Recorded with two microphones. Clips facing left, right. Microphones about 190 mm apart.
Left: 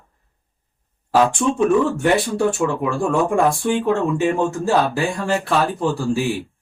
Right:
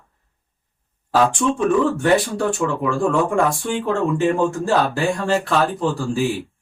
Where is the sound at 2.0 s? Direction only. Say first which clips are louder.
Even; 5° left (ahead or behind).